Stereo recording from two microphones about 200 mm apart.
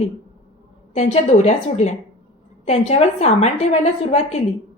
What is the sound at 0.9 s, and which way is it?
Speech, 35° left (ahead or behind).